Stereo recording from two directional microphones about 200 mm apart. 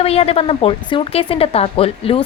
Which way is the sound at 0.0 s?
30° left (ahead or behind).